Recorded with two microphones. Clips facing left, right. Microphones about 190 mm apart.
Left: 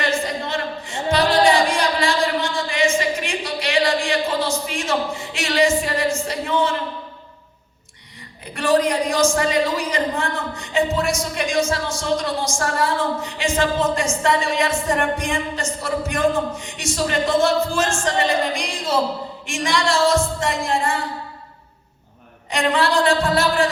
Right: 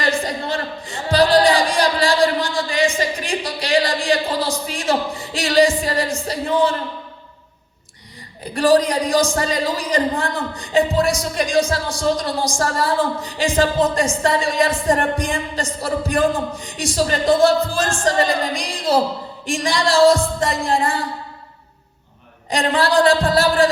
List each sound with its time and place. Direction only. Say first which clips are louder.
0.0 s a sound: right 1 dB; 35° right (ahead or behind)
8.5 s speech: right 3 dB; 35° right (ahead or behind)
22.4 s speech: right 1 dB; 35° right (ahead or behind)